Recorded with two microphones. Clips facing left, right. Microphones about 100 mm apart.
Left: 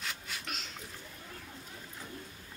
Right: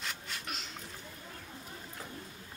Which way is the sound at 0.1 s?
Centre (ahead or behind).